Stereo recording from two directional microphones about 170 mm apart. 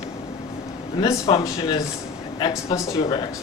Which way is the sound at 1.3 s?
25° left (ahead or behind).